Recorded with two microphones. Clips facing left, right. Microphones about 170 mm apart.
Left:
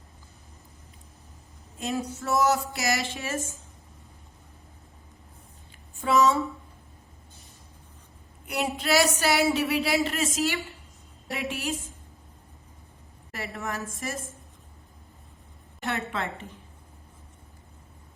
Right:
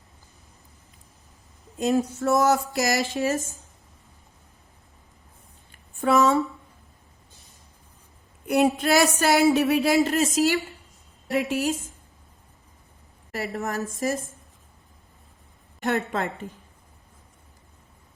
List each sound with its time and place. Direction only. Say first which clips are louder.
1.8 s speech: right 8 dB; 50° right (ahead or behind)
6.0 s speech: right 2 dB; 55° right (ahead or behind)
8.4 s a woman's voice: right 7 dB; 50° right (ahead or behind)
13.3 s a woman's voice: right 5 dB; 40° right (ahead or behind)
15.8 s a woman's voice: right 5 dB; 40° right (ahead or behind)